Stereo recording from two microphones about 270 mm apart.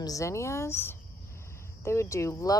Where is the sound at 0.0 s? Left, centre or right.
Centre.